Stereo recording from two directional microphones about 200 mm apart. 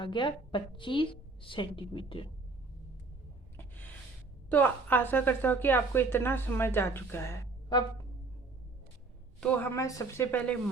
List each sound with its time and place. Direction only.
0.0 s a woman's voice: 25° left (ahead or behind)
4.4 s a woman's voice: 10° left (ahead or behind)
9.4 s a woman's voice: 10° left (ahead or behind)